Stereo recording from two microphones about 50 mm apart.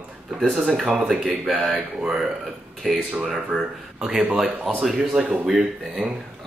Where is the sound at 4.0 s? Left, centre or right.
Right.